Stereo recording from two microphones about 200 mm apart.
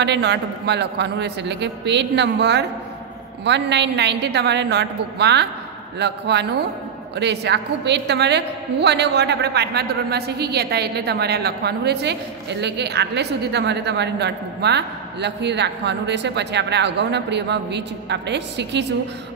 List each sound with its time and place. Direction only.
0.0 s a woman's voice: 60° right (ahead or behind)